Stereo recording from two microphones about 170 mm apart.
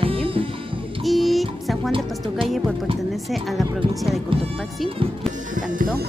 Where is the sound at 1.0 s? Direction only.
Centre (ahead or behind).